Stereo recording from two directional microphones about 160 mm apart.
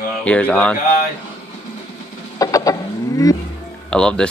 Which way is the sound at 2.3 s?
20° left (ahead or behind).